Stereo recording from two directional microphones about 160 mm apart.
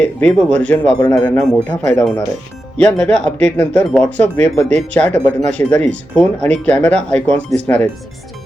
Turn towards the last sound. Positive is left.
turn(degrees=10)  # may be behind; listen again after turning